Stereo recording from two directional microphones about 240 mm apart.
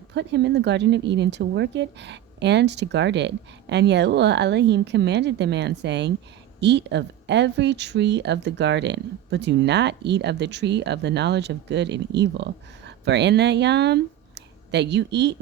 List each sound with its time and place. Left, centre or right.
0.1 s speech: right